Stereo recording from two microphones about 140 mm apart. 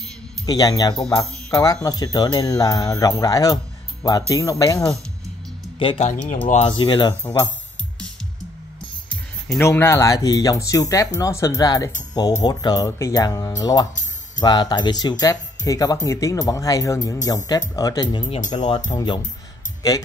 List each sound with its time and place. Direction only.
0.5 s speech: 25° left (ahead or behind)
5.8 s speech: 45° left (ahead or behind)
6.6 s speech: 35° left (ahead or behind)
9.6 s speech: 20° left (ahead or behind)